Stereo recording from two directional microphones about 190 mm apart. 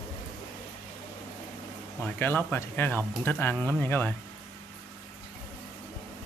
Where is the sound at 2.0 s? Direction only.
10° left (ahead or behind).